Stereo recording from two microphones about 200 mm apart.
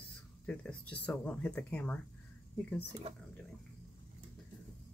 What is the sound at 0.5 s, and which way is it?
Speech, 5° left (ahead or behind).